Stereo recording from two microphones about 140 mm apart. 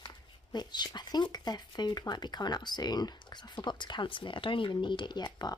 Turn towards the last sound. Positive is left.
turn(degrees=30)  # may be behind; listen again after turning